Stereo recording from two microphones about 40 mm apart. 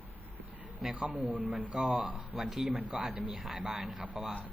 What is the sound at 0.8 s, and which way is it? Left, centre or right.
Speech, centre.